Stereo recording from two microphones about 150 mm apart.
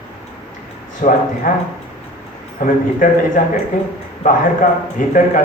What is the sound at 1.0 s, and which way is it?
Speech, 55° left (ahead or behind).